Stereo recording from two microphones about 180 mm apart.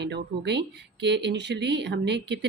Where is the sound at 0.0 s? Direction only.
70° right (ahead or behind).